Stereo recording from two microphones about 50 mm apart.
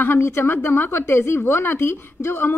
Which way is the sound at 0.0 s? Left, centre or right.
Left.